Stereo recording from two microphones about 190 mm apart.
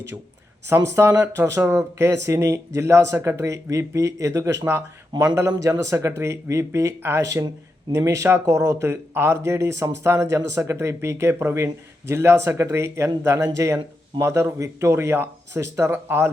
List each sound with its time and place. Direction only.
0.7 s speech: 15° right (ahead or behind)